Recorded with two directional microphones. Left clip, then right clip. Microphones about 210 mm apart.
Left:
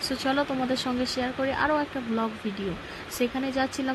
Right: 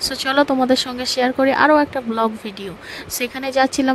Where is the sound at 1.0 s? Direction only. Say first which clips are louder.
Right 11 dB; 50° right (ahead or behind).